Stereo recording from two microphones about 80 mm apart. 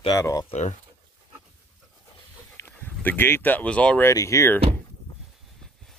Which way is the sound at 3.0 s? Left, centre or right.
Left.